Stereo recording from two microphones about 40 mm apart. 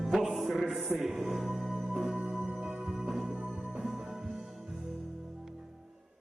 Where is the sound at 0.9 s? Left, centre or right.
Centre.